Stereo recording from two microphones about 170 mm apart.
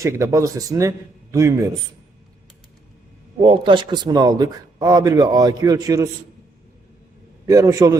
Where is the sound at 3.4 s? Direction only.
30° right (ahead or behind).